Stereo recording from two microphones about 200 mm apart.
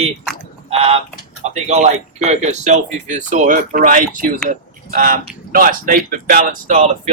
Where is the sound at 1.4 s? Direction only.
35° right (ahead or behind).